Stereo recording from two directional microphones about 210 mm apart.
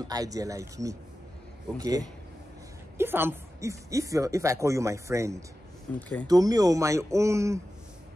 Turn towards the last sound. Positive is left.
turn(degrees=-15)  # may be behind; listen again after turning